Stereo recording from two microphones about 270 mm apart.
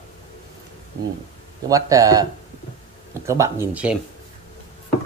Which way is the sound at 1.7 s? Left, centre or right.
Centre.